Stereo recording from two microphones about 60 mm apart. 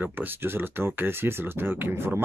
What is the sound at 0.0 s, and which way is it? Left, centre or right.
Speech, right.